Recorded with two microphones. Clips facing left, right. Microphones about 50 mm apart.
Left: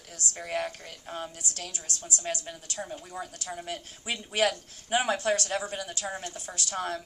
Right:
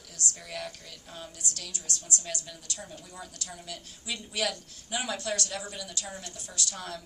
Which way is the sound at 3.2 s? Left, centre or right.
Left.